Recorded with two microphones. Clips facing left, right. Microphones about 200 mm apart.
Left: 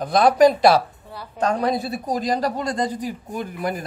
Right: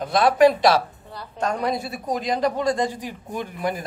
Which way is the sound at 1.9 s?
35° left (ahead or behind).